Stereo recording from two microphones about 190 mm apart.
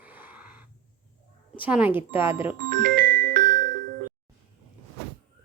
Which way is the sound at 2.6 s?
50° right (ahead or behind).